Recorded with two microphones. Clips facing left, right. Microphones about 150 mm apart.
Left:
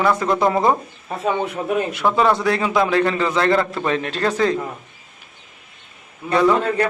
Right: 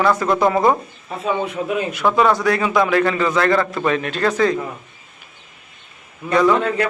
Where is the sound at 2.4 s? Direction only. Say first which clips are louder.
Right 1 dB; 25° left (ahead or behind).